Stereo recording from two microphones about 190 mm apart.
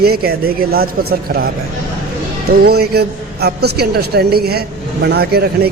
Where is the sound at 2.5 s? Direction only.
55° right (ahead or behind).